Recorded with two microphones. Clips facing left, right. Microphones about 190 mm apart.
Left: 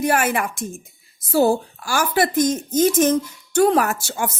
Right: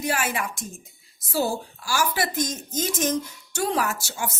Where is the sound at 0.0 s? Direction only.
55° left (ahead or behind).